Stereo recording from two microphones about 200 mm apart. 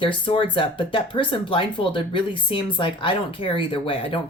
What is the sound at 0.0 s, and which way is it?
Speech, 25° left (ahead or behind).